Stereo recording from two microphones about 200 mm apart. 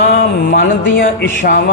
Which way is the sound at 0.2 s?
45° left (ahead or behind).